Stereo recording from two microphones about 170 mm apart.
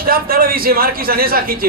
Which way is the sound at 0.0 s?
60° right (ahead or behind).